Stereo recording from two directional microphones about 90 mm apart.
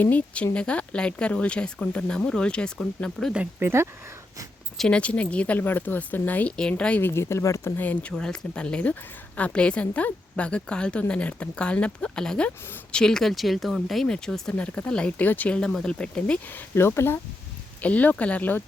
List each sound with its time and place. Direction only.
0.0 s a woman's voice: 20° left (ahead or behind)
3.6 s speech: 30° right (ahead or behind)
4.8 s a woman's voice: 10° left (ahead or behind)
7.0 s speech: 30° left (ahead or behind)
7.8 s a woman's voice: 20° left (ahead or behind)
16.5 s speech: 25° left (ahead or behind)
17.7 s a woman's voice: 15° left (ahead or behind)